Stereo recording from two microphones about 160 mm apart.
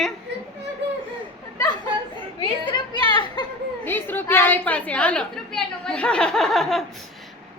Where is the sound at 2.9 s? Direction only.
30° left (ahead or behind).